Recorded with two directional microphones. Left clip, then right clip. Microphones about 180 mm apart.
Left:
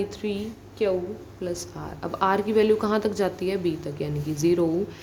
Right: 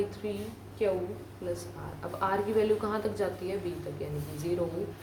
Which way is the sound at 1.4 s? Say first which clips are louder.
Left 5 dB; 60° left (ahead or behind).